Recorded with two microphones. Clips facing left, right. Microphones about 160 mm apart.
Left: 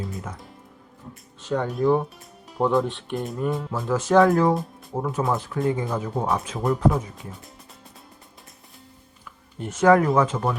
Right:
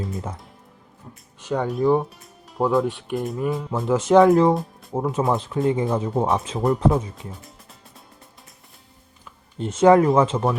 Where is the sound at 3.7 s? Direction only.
20° right (ahead or behind).